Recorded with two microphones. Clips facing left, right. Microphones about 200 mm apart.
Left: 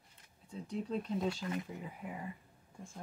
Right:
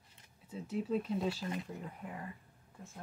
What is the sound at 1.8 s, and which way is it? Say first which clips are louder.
Speech: left 1 dB; 5° left (ahead or behind).